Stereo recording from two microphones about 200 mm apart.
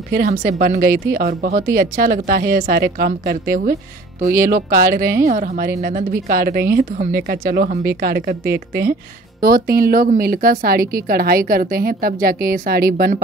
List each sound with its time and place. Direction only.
0.1 s speech: 50° right (ahead or behind)